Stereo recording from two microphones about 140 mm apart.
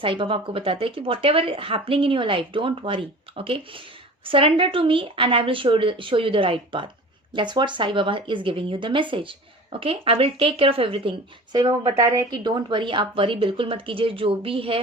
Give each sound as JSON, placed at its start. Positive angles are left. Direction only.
{"t": 0.0, "sound": "speech", "side_deg": -40}
{"t": 11.5, "sound": "speech", "side_deg": -30}